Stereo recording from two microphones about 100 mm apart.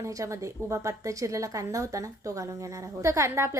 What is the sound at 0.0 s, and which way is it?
A woman's voice, 30° right (ahead or behind).